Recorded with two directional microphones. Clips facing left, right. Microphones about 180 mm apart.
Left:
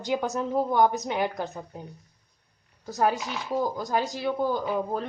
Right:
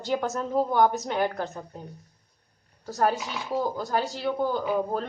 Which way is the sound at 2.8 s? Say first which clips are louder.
Even; 10° left (ahead or behind).